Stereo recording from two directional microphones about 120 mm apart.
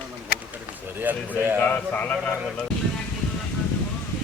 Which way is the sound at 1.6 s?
15° left (ahead or behind).